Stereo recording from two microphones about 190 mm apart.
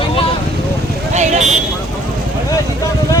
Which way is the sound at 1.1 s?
40° right (ahead or behind).